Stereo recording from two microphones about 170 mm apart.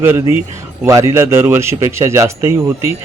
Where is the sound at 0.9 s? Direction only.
15° right (ahead or behind).